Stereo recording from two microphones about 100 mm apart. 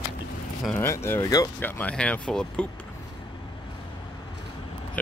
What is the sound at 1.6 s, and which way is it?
Speech, 15° left (ahead or behind).